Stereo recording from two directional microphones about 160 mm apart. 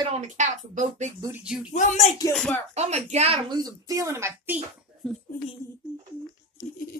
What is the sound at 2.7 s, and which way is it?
Speech, 45° right (ahead or behind).